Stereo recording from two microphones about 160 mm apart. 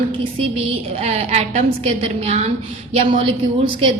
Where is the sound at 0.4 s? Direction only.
35° right (ahead or behind).